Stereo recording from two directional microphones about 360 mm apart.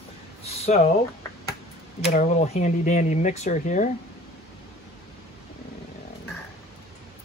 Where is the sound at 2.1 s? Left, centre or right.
Centre.